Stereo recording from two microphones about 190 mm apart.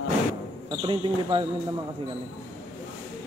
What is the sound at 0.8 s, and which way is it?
Speech, 25° right (ahead or behind).